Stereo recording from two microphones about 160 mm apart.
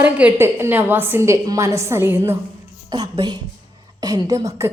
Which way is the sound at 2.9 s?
25° right (ahead or behind).